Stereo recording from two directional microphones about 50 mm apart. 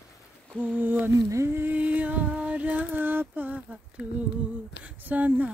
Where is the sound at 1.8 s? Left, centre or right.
Right.